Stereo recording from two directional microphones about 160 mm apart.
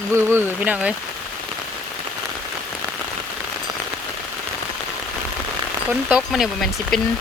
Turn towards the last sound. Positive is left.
turn(degrees=0)  # may be behind; listen again after turning